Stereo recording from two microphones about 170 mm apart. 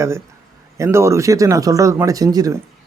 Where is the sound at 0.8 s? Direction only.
15° right (ahead or behind).